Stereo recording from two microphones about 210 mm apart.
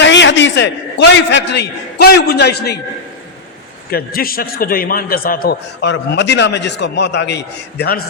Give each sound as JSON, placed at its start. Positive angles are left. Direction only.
{"t": 0.0, "sound": "a man's voice", "side_deg": 60}
{"t": 3.9, "sound": "a man's voice", "side_deg": 45}